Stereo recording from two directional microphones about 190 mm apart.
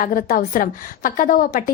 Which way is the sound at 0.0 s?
50° left (ahead or behind).